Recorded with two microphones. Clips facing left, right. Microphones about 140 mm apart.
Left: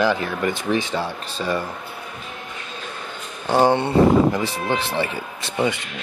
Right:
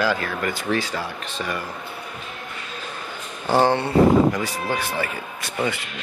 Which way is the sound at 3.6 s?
15° left (ahead or behind).